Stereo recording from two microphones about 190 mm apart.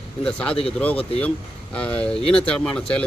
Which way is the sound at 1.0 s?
30° left (ahead or behind).